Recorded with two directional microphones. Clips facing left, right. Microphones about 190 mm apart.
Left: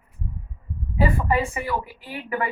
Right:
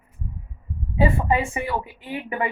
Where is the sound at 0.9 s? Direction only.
20° right (ahead or behind).